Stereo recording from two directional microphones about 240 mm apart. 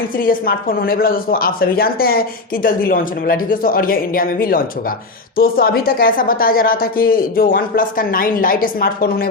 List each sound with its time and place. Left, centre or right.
0.2 s speech: left